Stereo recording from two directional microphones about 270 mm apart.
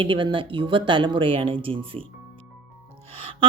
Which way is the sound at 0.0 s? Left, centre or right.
Centre.